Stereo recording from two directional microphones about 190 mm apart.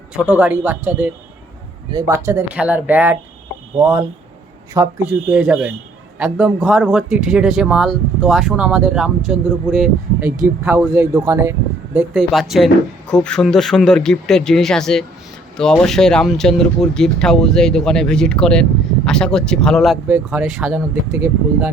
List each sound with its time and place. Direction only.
0.1 s speech: 5° right (ahead or behind)
5.3 s speech: 5° right (ahead or behind)
10.6 s speech: 15° right (ahead or behind)
11.9 s speech: centre (ahead or behind)
20.1 s speech: 10° right (ahead or behind)